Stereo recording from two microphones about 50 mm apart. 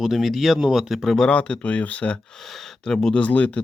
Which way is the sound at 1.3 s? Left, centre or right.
Left.